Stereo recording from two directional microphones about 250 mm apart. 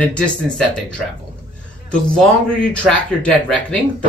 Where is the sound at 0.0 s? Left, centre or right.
Centre.